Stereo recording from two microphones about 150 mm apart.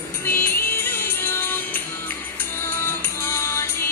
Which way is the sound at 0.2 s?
15° left (ahead or behind).